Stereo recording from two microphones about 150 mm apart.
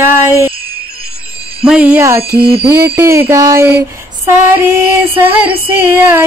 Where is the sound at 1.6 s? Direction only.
5° right (ahead or behind).